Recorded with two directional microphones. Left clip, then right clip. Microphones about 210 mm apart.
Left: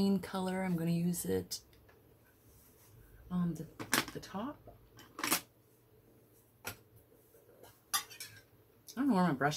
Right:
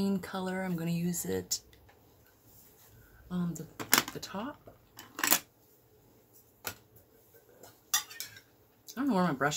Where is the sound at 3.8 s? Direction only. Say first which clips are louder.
Right 6 dB; 20° right (ahead or behind).